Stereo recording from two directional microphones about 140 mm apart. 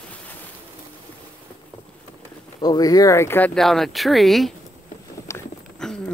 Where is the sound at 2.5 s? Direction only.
30° left (ahead or behind).